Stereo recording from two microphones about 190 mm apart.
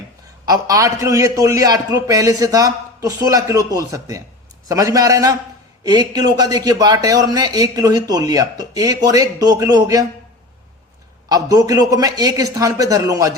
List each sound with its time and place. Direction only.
0.4 s a man's voice: 20° right (ahead or behind)
11.3 s a man's voice: 20° right (ahead or behind)